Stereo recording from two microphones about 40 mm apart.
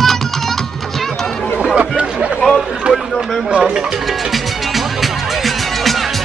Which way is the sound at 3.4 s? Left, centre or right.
Right.